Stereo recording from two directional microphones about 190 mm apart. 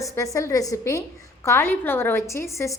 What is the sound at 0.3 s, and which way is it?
A woman's voice, 15° left (ahead or behind).